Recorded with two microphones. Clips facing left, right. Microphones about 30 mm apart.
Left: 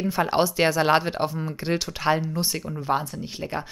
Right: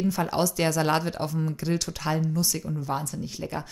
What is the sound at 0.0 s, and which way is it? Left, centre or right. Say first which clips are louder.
Speech: left 3 dB; left.